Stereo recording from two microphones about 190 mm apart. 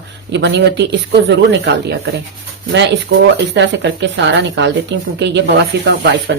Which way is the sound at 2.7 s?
65° right (ahead or behind).